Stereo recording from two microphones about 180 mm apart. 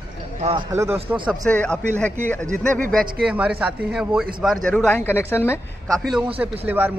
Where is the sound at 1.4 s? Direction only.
5° left (ahead or behind).